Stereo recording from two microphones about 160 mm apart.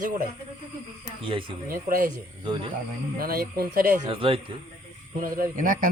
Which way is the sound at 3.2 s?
65° right (ahead or behind).